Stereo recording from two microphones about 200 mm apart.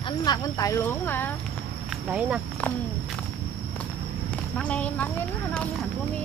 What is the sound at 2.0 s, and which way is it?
Speech, 5° right (ahead or behind).